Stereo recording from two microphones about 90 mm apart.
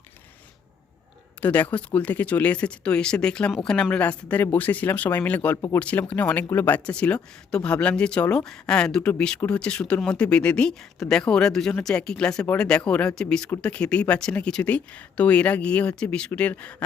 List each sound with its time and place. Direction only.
1.4 s speech: 20° left (ahead or behind)